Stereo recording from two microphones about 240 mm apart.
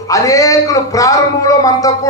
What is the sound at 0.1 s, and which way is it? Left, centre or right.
A man's voice, centre.